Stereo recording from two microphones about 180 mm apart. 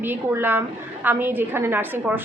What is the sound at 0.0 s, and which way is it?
A woman's voice, 10° right (ahead or behind).